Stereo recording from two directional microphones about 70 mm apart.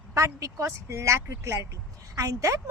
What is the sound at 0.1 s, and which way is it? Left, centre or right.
Speech, right.